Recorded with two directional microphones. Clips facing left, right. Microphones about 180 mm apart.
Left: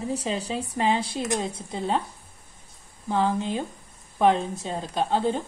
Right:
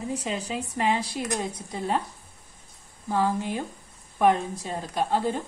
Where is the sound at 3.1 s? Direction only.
20° left (ahead or behind).